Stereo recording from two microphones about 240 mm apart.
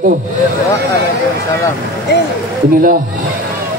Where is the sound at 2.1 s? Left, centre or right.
Left.